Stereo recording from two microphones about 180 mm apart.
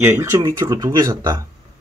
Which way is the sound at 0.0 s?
15° right (ahead or behind).